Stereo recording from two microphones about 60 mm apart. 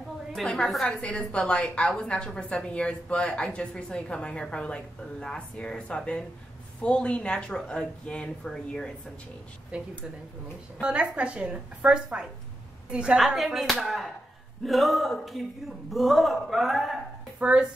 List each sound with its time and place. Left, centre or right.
0.8 s a woman's voice: centre
10.8 s a woman's voice: centre
13.2 s a man's voice: centre
17.4 s speech: centre